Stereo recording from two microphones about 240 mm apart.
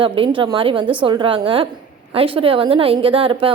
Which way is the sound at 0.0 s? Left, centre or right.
Right.